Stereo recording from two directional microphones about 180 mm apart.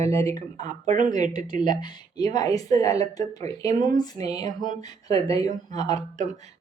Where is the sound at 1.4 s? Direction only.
25° left (ahead or behind).